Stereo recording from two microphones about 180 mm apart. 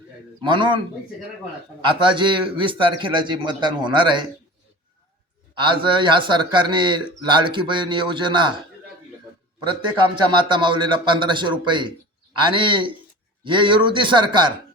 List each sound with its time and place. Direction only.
0.4 s speech: 25° right (ahead or behind)
1.8 s speech: 25° right (ahead or behind)
5.5 s speech: 25° right (ahead or behind)
10.3 s speech: 25° right (ahead or behind)